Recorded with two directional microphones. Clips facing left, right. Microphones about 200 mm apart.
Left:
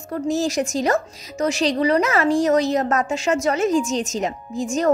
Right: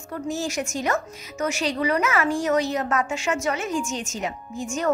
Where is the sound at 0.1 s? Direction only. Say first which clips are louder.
Left 6 dB; 40° left (ahead or behind).